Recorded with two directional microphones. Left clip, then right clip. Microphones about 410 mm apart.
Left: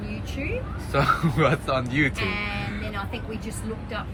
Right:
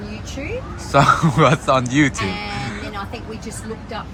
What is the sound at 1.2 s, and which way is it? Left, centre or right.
Speech, right.